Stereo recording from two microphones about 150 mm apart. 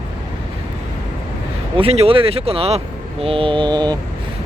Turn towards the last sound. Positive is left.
turn(degrees=-30)  # may be behind; listen again after turning